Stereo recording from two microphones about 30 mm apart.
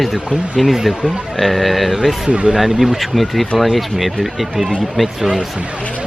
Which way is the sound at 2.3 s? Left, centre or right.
Right.